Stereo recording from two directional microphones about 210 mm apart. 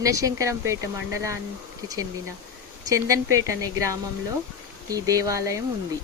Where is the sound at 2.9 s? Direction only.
15° right (ahead or behind).